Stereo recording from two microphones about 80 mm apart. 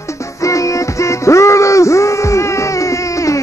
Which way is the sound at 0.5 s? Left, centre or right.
Left.